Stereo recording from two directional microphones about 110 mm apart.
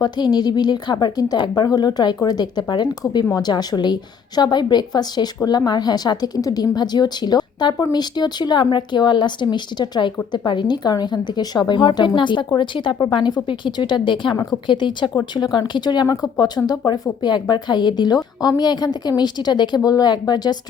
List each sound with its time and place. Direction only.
0.0 s speech: 40° left (ahead or behind)